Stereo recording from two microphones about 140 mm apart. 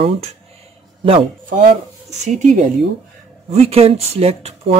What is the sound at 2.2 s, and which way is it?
Speech, 60° right (ahead or behind).